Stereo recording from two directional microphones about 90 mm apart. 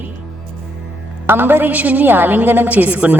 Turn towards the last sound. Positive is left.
turn(degrees=-15)  # may be behind; listen again after turning